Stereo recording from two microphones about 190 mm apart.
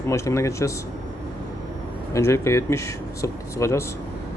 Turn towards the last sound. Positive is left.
turn(degrees=15)  # may be behind; listen again after turning